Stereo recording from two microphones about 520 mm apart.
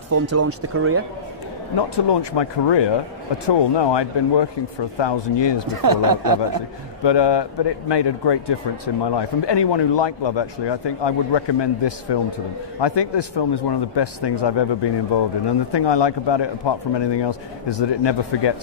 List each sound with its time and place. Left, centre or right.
0.1 s speech: right
1.8 s speech: left
5.8 s speech: right
7.0 s speech: left